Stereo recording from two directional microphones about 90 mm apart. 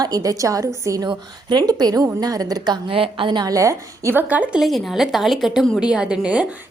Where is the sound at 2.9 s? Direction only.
80° right.